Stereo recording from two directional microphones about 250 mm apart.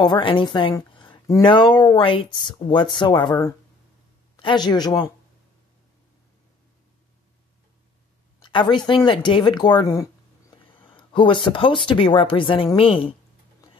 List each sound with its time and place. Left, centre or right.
0.0 s speech: centre
8.4 s speech: centre